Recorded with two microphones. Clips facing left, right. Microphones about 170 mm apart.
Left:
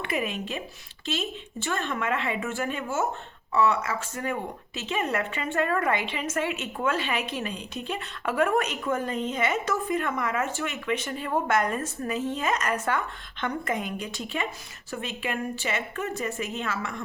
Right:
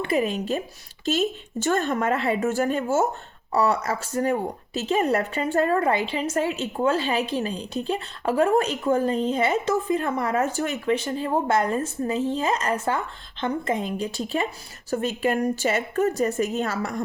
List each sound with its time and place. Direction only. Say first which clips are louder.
0.0 s speech: right 6 dB; 35° right (ahead or behind)